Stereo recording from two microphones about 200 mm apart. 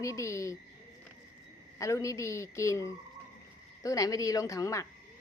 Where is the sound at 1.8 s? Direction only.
15° left (ahead or behind).